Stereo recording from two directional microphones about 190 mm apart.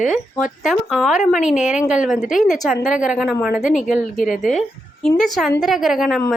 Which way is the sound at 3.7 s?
40° left (ahead or behind).